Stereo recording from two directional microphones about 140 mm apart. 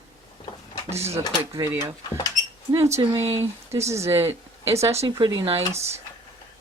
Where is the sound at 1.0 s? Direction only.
20° right (ahead or behind).